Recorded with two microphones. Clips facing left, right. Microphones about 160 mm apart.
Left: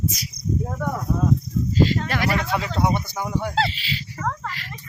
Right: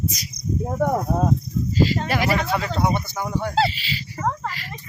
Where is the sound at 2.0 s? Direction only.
10° right (ahead or behind).